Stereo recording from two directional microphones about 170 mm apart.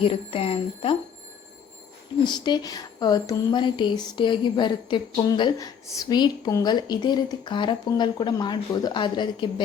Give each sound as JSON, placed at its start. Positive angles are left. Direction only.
{"t": 0.0, "sound": "speech", "side_deg": 30}
{"t": 2.2, "sound": "speech", "side_deg": 25}